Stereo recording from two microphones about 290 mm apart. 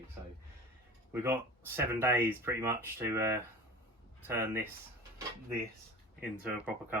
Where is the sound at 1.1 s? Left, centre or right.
Centre.